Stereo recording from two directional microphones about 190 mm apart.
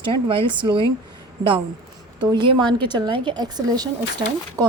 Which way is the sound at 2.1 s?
25° right (ahead or behind).